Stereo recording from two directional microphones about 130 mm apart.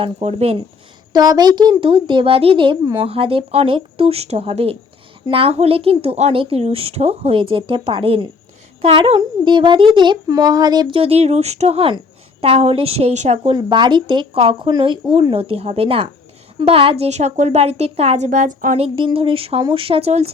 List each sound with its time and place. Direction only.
0.0 s a child's voice: 55° right (ahead or behind)
1.1 s a child's voice: 30° right (ahead or behind); by 13.5 s 55° right (ahead or behind)
13.5 s a child's voice: 35° right (ahead or behind); by 18.3 s 55° right (ahead or behind)
18.3 s a woman's voice: 75° right (ahead or behind)
18.8 s a child's voice: 45° right (ahead or behind)